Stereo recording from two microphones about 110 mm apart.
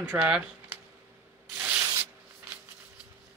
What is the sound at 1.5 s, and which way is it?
Rub, 20° right (ahead or behind).